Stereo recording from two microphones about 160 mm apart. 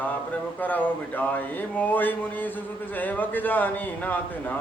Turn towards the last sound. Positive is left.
turn(degrees=10)  # may be behind; listen again after turning